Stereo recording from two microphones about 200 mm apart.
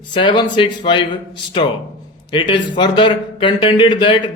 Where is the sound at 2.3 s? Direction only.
25° left (ahead or behind).